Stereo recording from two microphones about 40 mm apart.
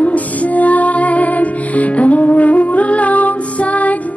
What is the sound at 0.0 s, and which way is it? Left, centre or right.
Music, left.